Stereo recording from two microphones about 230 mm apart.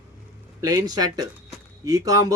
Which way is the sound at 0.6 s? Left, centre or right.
Centre.